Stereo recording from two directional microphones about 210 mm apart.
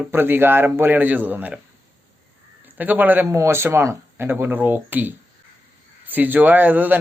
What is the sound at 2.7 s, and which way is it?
A man's voice, 10° right (ahead or behind).